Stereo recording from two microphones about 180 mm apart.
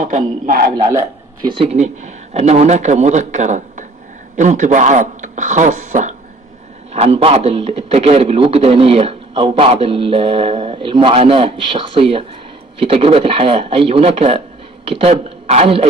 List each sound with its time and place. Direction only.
0.0 s a man's voice: 50° right (ahead or behind)
0.7 s a man's voice: 20° right (ahead or behind)